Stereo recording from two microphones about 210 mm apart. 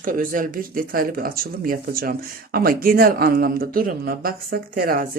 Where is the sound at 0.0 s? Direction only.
40° right (ahead or behind).